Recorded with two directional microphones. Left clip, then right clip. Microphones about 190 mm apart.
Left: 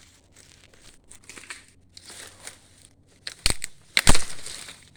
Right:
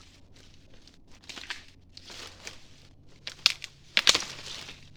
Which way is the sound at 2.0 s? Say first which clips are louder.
Left 2 dB; 35° left (ahead or behind).